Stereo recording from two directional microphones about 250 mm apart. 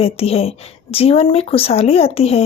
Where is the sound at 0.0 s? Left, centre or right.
Left.